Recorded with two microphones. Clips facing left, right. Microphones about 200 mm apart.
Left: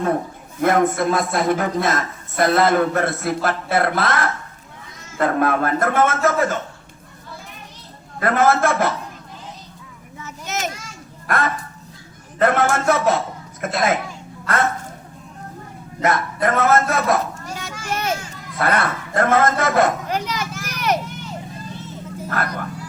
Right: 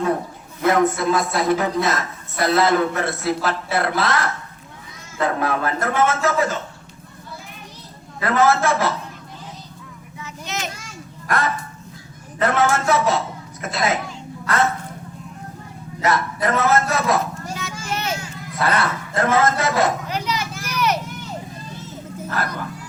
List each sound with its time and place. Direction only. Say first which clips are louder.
0.6 s a man's voice: left 1 dB; 50° left (ahead or behind)
8.2 s a man's voice: left 1 dB; 50° left (ahead or behind)
10.2 s children playing: left 2 dB; 45° left (ahead or behind)
11.3 s a man's voice: left 1 dB; 50° left (ahead or behind)
16.0 s a man's voice: left 1 dB; 50° left (ahead or behind)
17.6 s children playing: left 2 dB; 50° left (ahead or behind)
18.6 s a woman's voice: left 1 dB; 55° left (ahead or behind)
20.7 s vehicle: even; 50° left (ahead or behind)